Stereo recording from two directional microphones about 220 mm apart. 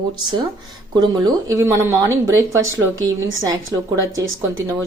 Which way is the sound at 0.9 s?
15° right (ahead or behind).